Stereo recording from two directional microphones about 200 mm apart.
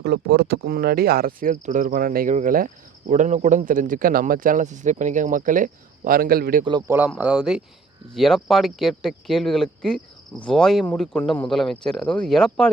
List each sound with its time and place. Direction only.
0.0 s speech: 55° right (ahead or behind)
6.8 s speech: 10° right (ahead or behind)